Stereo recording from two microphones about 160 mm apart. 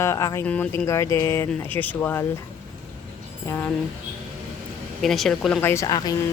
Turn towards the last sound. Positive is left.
turn(degrees=25)  # may be behind; listen again after turning